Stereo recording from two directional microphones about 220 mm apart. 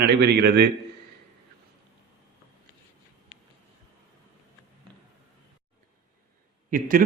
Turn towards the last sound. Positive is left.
turn(degrees=-40)  # may be behind; listen again after turning